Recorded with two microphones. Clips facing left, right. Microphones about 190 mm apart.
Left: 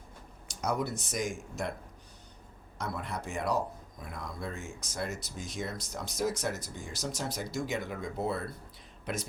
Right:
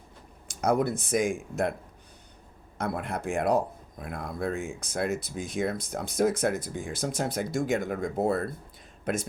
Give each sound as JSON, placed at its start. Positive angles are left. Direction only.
{"t": 0.4, "sound": "speech", "side_deg": -55}
{"t": 2.7, "sound": "speech", "side_deg": -55}